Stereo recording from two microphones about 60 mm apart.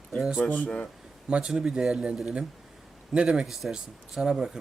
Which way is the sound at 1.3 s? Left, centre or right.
Centre.